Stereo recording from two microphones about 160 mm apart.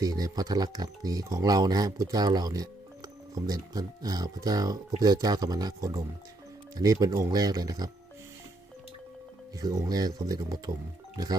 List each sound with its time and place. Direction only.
0.0 s speech: 25° right (ahead or behind)
9.6 s speech: 25° right (ahead or behind)